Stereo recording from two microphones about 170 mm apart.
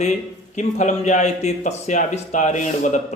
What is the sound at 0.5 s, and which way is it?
Speech, 45° left (ahead or behind).